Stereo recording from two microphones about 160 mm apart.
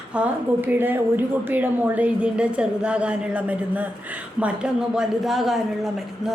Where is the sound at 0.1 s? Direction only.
10° right (ahead or behind).